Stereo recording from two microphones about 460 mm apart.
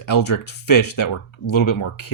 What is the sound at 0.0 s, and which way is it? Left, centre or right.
Speech, left.